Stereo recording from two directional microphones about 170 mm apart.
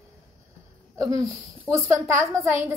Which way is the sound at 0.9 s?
20° right (ahead or behind).